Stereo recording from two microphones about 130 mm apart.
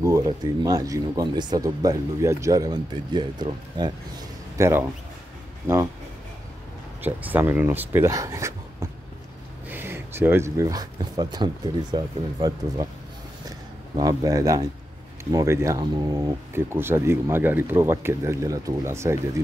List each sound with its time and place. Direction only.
0.0 s speech: 25° right (ahead or behind)
4.6 s speech: 20° right (ahead or behind)
7.0 s speech: 15° right (ahead or behind)